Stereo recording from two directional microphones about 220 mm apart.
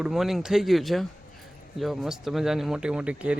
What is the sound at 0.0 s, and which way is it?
Speech, centre (ahead or behind).